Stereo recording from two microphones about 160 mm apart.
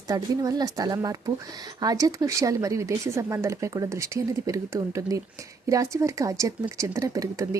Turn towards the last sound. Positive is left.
turn(degrees=-20)  # may be behind; listen again after turning